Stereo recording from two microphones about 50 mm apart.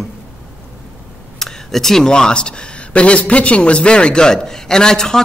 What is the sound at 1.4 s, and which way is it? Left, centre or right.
Speech, centre.